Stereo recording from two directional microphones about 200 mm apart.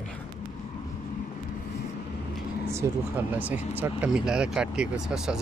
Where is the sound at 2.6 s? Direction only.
10° right (ahead or behind).